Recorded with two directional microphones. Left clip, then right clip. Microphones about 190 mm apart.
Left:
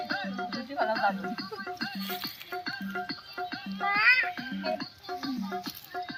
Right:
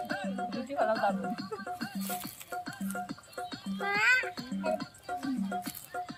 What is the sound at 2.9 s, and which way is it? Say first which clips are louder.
Music: left 4 dB; 60° right (ahead or behind).